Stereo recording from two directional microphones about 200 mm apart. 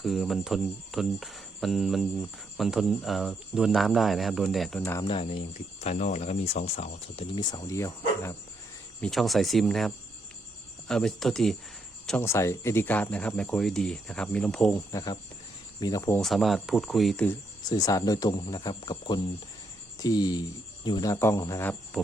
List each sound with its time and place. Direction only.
0.0 s cricket: centre (ahead or behind)
4.8 s speech: 10° left (ahead or behind)
5.0 s speech: 25° left (ahead or behind)
5.8 s speech: 35° left (ahead or behind); by 8.4 s 15° left (ahead or behind)
9.0 s cricket: centre (ahead or behind)
14.9 s speech: 20° left (ahead or behind)
16.2 s cricket: centre (ahead or behind)
17.6 s speech: 20° left (ahead or behind)